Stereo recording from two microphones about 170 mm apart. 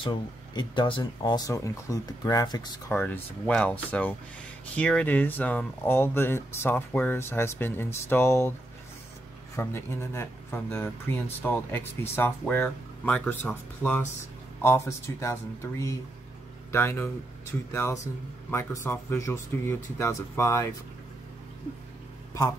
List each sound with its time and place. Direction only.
0.0 s speech: 30° left (ahead or behind)
2.9 s speech: 10° left (ahead or behind)
9.6 s speech: 15° left (ahead or behind)